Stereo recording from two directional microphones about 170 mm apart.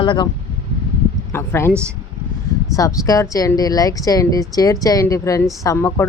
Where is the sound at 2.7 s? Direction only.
20° left (ahead or behind).